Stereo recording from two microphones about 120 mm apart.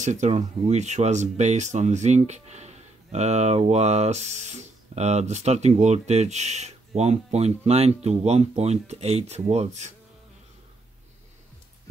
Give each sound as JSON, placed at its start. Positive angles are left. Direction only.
{"t": 0.0, "sound": "speech", "side_deg": -80}